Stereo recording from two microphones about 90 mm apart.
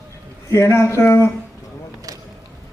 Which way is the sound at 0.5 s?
30° left (ahead or behind).